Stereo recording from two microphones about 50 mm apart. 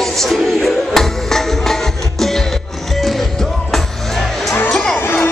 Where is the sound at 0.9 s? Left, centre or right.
Centre.